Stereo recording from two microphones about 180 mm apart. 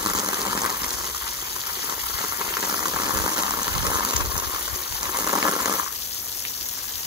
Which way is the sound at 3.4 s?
20° right (ahead or behind).